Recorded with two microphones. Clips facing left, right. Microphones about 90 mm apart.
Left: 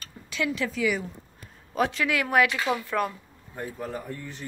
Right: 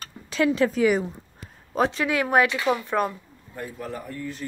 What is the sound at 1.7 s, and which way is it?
Speech, 25° right (ahead or behind).